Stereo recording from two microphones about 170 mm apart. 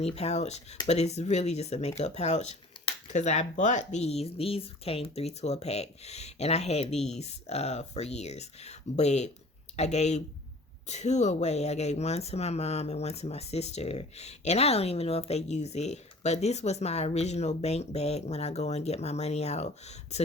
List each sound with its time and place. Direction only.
0.0 s speech: 40° left (ahead or behind)